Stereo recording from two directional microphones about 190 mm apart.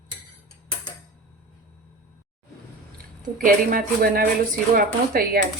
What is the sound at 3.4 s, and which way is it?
Speech, 50° right (ahead or behind).